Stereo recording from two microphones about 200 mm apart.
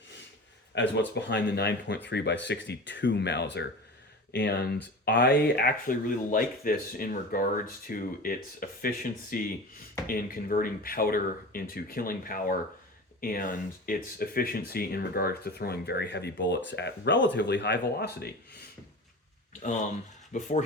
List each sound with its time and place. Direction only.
0.7 s speech: 60° left (ahead or behind)
20.3 s speech: 35° left (ahead or behind)